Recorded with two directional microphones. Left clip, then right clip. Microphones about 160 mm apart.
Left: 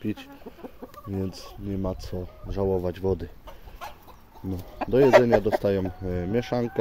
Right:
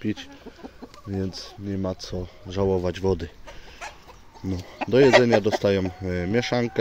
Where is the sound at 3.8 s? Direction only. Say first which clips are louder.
Right 2 dB; 90° left.